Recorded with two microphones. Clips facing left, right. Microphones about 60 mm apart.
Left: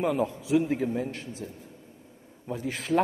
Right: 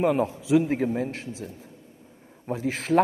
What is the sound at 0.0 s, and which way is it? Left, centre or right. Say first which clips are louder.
A man's voice: right 4 dB; right.